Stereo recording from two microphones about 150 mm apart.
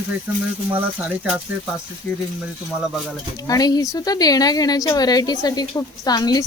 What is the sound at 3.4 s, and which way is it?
A woman's voice, 25° left (ahead or behind).